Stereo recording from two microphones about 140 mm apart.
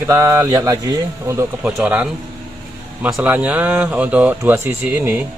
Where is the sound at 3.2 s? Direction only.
10° right (ahead or behind).